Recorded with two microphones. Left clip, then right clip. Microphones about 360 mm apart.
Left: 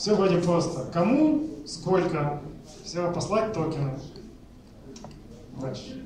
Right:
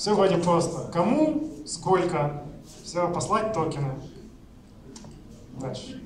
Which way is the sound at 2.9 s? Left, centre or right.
Centre.